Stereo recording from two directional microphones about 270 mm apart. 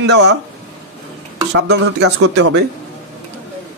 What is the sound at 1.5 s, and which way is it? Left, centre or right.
Speech, right.